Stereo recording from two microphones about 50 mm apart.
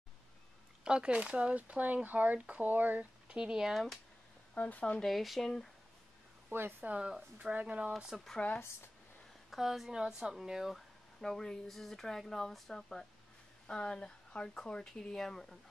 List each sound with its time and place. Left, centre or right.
0.8 s speech: centre; by 3.1 s right
3.3 s speech: centre
3.7 s speech: centre
4.6 s speech: left
5.0 s speech: centre
6.8 s speech: right
8.1 s a woman's voice: centre
9.5 s a woman's voice: centre
10.7 s speech: centre
13.7 s speech: centre